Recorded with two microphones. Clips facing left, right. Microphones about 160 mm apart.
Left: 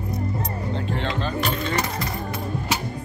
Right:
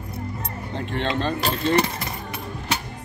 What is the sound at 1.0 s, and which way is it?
Keys jangling, 30° right (ahead or behind).